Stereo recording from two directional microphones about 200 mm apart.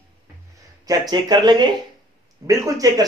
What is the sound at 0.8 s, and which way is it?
Speech, 20° right (ahead or behind).